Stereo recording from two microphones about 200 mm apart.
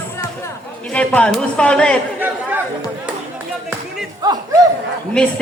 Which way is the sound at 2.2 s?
10° right (ahead or behind).